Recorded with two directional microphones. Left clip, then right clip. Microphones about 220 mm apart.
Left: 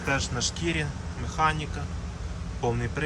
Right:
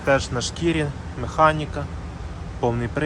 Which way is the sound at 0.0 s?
Centre (ahead or behind).